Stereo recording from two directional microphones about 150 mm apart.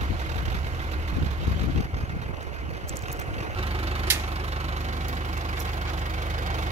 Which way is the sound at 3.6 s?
40° right (ahead or behind).